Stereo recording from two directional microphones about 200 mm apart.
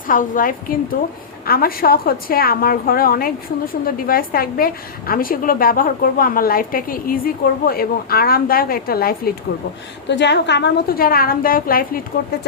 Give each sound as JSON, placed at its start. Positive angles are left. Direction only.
{"t": 0.1, "sound": "a woman's voice", "side_deg": 40}
{"t": 10.1, "sound": "a woman's voice", "side_deg": 60}